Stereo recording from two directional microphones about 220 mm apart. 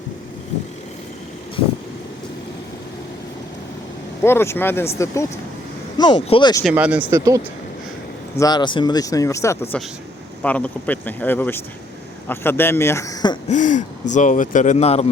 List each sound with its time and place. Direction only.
4.2 s speech: 10° left (ahead or behind)
6.7 s speech: 5° right (ahead or behind)
8.4 s speech: 20° left (ahead or behind)
13.5 s speech: 35° left (ahead or behind)